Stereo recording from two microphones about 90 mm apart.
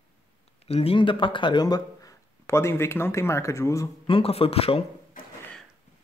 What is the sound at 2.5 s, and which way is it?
Speech, 30° left (ahead or behind).